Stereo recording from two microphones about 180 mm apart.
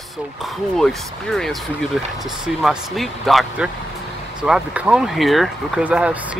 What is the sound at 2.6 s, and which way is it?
Speech, centre (ahead or behind).